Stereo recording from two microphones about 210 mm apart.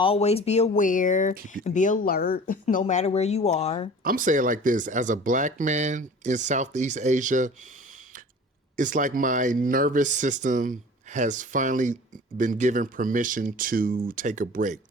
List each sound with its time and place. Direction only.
0.0 s speech: 30° left (ahead or behind)
4.0 s speech: 40° right (ahead or behind)
8.7 s speech: 40° right (ahead or behind)